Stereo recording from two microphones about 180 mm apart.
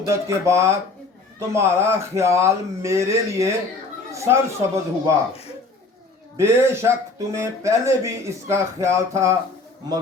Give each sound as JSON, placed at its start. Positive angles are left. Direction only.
{"t": 0.0, "sound": "speech", "side_deg": -15}
{"t": 6.3, "sound": "speech", "side_deg": -15}